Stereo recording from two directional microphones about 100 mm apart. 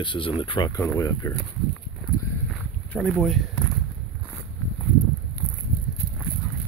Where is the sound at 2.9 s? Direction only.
10° left (ahead or behind).